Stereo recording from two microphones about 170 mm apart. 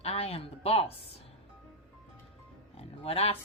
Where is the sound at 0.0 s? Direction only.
35° left (ahead or behind).